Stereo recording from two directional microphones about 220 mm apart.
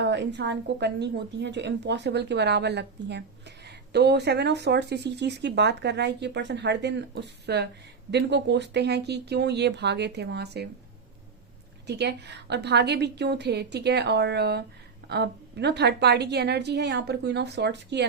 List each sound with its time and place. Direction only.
0.0 s a woman's voice: 55° right (ahead or behind)
11.9 s a woman's voice: 50° right (ahead or behind)